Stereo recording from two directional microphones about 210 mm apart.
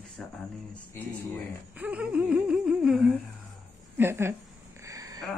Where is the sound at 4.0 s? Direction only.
10° right (ahead or behind).